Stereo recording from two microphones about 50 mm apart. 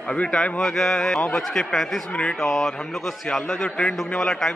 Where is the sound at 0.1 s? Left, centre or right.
Left.